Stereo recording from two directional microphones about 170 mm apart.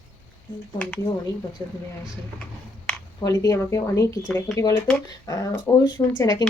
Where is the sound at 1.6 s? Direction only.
25° left (ahead or behind).